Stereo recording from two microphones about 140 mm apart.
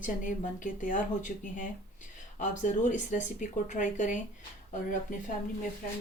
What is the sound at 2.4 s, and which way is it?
Speech, 60° left (ahead or behind).